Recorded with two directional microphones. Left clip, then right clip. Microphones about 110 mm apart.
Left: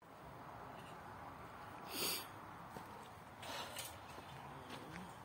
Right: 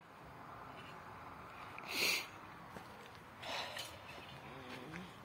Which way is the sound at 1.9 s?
15° left (ahead or behind).